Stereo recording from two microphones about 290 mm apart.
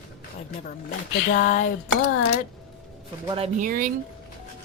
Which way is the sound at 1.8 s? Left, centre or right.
Left.